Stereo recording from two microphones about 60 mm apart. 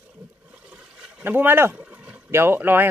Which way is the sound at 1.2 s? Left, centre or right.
Right.